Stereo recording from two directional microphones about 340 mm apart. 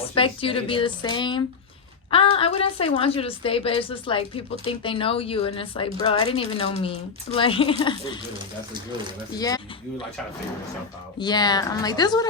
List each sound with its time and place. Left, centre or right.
0.1 s a woman's voice: centre
11.2 s a woman's voice: centre